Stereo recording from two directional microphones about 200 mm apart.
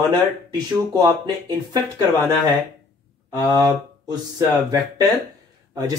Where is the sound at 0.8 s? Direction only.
20° right (ahead or behind).